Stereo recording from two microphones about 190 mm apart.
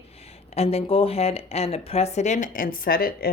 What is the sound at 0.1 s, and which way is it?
A woman's voice, 30° left (ahead or behind).